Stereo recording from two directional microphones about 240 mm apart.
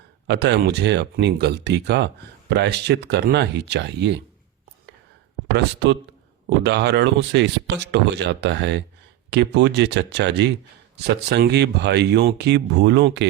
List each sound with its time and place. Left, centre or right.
0.3 s speech: right
5.5 s speech: right